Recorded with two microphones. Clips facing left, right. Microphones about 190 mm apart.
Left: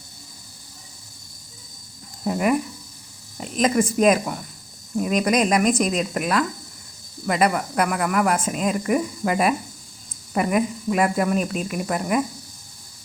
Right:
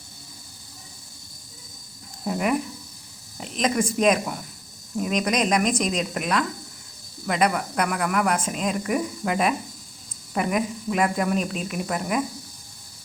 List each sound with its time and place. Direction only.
2.2 s speech: centre (ahead or behind)